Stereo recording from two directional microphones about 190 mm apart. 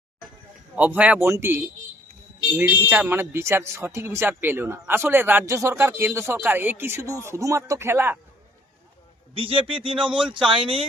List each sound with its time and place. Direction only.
0.8 s speech: 10° right (ahead or behind)
9.3 s speech: 30° right (ahead or behind)